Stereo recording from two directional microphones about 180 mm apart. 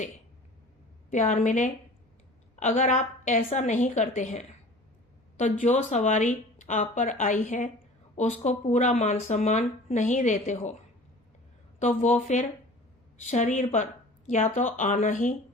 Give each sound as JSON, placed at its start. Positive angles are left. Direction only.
{"t": 1.1, "sound": "a woman's voice", "side_deg": 40}
{"t": 11.8, "sound": "a woman's voice", "side_deg": 40}